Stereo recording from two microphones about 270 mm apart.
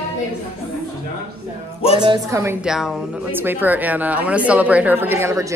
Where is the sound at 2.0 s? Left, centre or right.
Centre.